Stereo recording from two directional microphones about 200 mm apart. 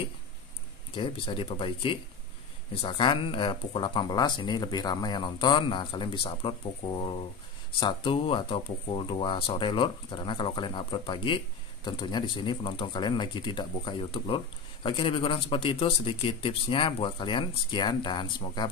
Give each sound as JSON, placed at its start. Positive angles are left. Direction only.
{"t": 0.9, "sound": "speech", "side_deg": 25}